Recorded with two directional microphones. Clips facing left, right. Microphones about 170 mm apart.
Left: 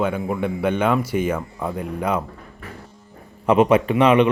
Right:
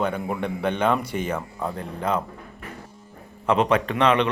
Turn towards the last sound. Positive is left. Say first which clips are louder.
# left 5 dB
turn(degrees=10)  # may be behind; listen again after turning